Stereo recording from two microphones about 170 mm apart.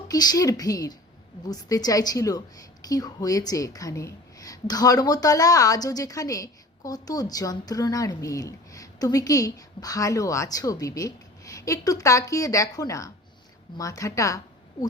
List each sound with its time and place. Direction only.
0.1 s a woman's voice: 20° left (ahead or behind)